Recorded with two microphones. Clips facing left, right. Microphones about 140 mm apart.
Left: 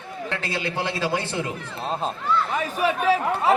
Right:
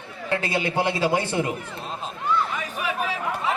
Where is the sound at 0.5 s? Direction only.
15° right (ahead or behind).